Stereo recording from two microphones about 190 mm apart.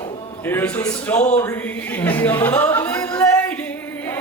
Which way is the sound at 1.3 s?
10° left (ahead or behind).